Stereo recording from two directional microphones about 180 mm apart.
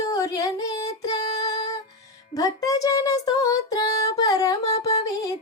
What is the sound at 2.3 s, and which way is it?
Music, 20° left (ahead or behind).